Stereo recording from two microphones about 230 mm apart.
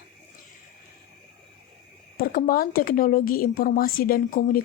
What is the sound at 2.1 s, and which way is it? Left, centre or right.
Speech, left.